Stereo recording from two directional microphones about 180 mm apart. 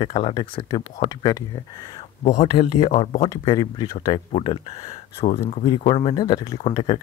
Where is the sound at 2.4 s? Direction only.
35° left (ahead or behind).